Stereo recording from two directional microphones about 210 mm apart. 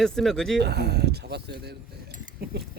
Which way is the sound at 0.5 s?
50° right (ahead or behind).